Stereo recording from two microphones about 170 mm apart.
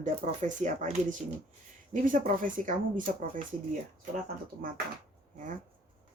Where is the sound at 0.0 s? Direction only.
45° right (ahead or behind).